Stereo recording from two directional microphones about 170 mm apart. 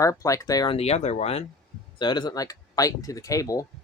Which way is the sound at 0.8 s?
40° left (ahead or behind).